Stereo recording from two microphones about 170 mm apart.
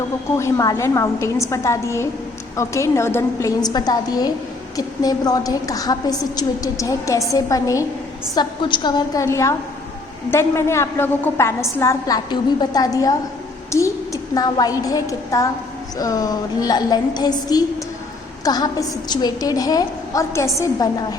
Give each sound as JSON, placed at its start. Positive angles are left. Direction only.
{"t": 0.3, "sound": "a woman's voice", "side_deg": 15}